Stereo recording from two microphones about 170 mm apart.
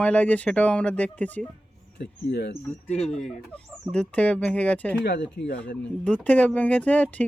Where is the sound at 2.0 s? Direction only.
80° left.